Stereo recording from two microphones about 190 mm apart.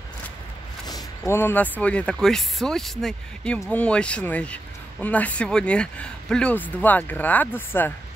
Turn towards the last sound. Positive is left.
turn(degrees=10)  # may be behind; listen again after turning